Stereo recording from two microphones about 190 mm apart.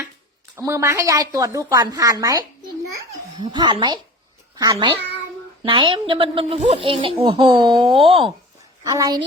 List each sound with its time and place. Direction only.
0.5 s a woman's voice: 15° right (ahead or behind)
8.8 s a woman's voice: 15° right (ahead or behind)